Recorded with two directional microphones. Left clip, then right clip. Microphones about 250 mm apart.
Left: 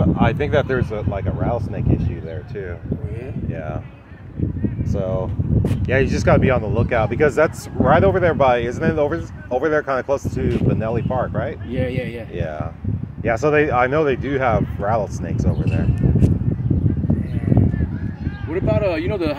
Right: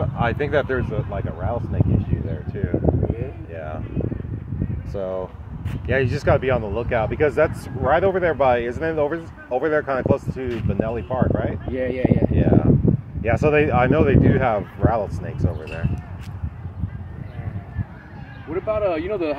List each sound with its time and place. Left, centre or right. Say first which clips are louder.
0.0 s speech: left 3 dB; centre
4.9 s speech: left 1 dB; centre
11.7 s speech: right 6 dB; left
12.4 s speech: right 8 dB; centre
18.5 s speech: left 2 dB; left